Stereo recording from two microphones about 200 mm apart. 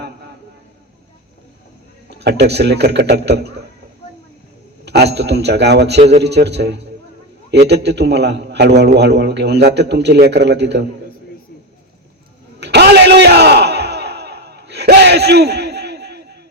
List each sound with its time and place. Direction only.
2.0 s a man's voice: 55° right (ahead or behind)
4.9 s a man's voice: 55° right (ahead or behind)
6.0 s a man's voice: 30° right (ahead or behind)
6.2 s a man's voice: 55° right (ahead or behind)
12.5 s battle cry: 55° right (ahead or behind)